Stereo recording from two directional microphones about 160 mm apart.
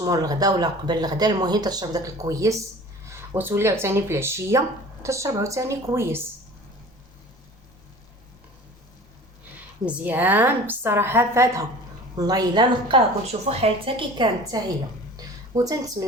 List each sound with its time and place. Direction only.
0.0 s a woman's voice: 25° right (ahead or behind)
9.8 s a woman's voice: 10° right (ahead or behind); by 13.0 s 25° right (ahead or behind)
13.2 s a woman's voice: 40° right (ahead or behind)
15.1 s a sound: 20° right (ahead or behind)